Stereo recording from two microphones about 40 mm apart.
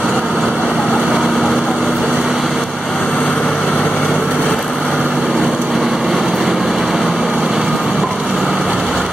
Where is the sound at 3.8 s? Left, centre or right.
Centre.